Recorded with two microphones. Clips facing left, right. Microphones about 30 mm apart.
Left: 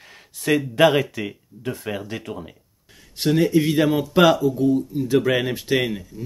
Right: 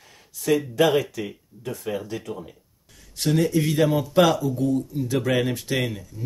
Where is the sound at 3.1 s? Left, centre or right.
Centre.